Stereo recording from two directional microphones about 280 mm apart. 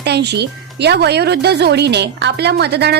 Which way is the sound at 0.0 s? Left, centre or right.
Right.